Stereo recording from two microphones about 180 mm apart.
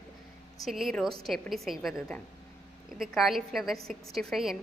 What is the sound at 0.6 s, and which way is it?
A woman's voice, centre (ahead or behind).